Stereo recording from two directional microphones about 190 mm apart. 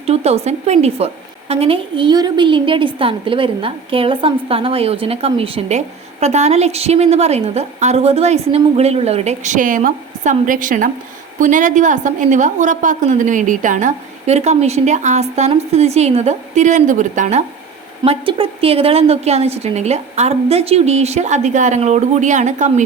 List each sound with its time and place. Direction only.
0.0 s a woman's voice: 35° right (ahead or behind)